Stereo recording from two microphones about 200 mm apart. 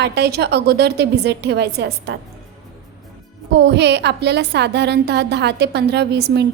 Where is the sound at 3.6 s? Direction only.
60° right (ahead or behind).